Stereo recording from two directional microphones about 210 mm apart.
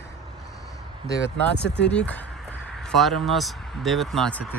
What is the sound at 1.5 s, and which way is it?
Speech, 55° left (ahead or behind).